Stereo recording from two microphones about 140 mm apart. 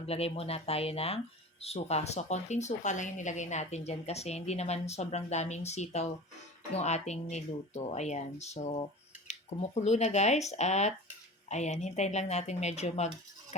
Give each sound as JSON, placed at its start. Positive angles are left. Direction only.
{"t": 0.0, "sound": "speech", "side_deg": 45}